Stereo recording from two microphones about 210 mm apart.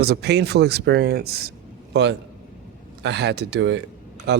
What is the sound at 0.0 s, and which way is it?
Speech, 50° right (ahead or behind).